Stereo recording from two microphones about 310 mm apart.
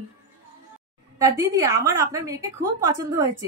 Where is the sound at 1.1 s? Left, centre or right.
Centre.